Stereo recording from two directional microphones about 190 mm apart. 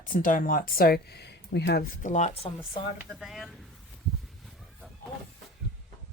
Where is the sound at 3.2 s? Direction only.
Centre (ahead or behind).